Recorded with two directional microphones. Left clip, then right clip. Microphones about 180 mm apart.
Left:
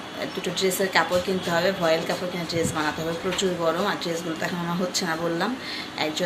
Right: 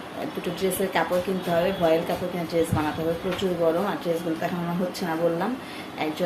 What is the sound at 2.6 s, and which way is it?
Speech, centre (ahead or behind).